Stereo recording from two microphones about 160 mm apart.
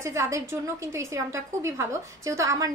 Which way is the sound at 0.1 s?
20° right (ahead or behind).